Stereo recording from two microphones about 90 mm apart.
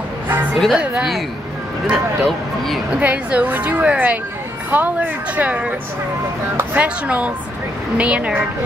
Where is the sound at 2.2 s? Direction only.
Centre (ahead or behind).